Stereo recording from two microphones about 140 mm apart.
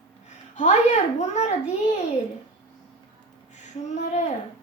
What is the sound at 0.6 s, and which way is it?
Music, 60° left (ahead or behind).